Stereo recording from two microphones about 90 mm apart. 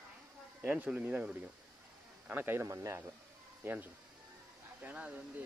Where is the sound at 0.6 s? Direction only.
15° right (ahead or behind).